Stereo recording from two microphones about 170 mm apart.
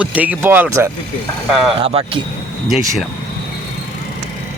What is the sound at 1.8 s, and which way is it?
Speech, 35° right (ahead or behind).